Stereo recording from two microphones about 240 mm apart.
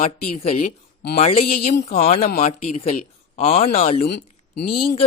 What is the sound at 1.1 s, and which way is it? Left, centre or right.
Speech, left.